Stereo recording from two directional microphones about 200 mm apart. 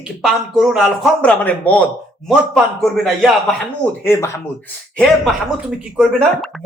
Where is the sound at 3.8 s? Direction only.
10° left (ahead or behind).